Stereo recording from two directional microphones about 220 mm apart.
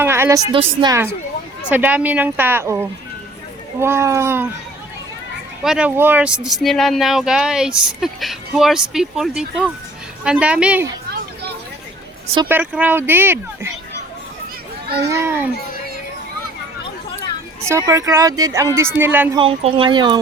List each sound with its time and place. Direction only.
0.0 s a sound: 10° right (ahead or behind)
0.8 s speech: 15° right (ahead or behind)
3.8 s speech: 10° right (ahead or behind)
5.6 s speech: 5° right (ahead or behind)
12.5 s speech: 10° right (ahead or behind)
15.0 s speech: 10° right (ahead or behind)
17.7 s speech: 15° right (ahead or behind)
19.4 s speech: 25° right (ahead or behind)